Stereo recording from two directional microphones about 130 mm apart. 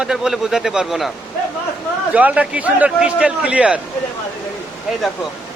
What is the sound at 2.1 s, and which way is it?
A man's voice, 10° right (ahead or behind).